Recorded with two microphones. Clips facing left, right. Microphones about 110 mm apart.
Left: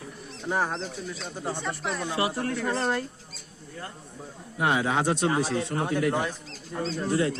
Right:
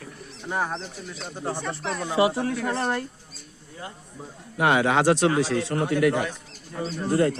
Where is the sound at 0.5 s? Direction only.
5° left (ahead or behind).